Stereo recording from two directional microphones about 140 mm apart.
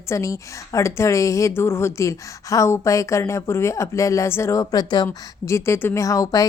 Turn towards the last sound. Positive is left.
turn(degrees=25)  # may be behind; listen again after turning